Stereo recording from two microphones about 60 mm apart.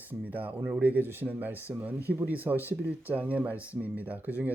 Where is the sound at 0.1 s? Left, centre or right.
Right.